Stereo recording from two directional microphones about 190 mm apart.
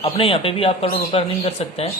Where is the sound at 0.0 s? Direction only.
30° left (ahead or behind).